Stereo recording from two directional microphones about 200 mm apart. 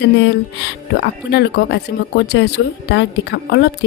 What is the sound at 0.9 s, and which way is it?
A woman's voice, 55° left (ahead or behind).